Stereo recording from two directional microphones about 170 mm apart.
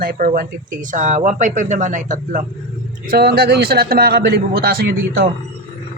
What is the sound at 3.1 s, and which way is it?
A man's voice, 65° right (ahead or behind).